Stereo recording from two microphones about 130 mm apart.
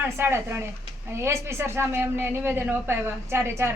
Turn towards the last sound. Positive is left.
turn(degrees=-20)  # may be behind; listen again after turning